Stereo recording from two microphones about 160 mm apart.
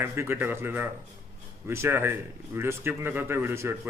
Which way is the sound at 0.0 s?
15° right (ahead or behind).